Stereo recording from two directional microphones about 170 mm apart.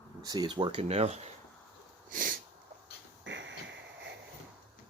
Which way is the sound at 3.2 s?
90° right.